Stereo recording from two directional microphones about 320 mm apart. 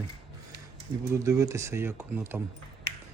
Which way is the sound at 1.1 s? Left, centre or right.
Centre.